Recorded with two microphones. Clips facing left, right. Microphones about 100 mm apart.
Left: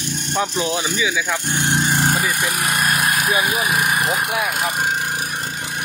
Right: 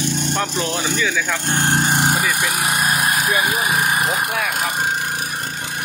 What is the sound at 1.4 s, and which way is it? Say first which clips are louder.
Speech: right 2 dB; 80° right.